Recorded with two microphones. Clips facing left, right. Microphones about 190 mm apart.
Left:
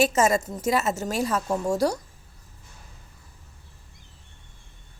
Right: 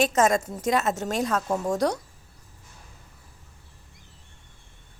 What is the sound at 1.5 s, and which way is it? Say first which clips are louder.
Speech: left 1 dB; 15° right (ahead or behind).